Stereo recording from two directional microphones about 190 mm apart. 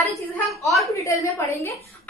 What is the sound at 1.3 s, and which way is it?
Speech, 15° left (ahead or behind).